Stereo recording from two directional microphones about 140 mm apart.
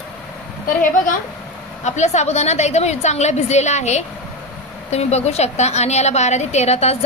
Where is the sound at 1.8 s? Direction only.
55° left (ahead or behind).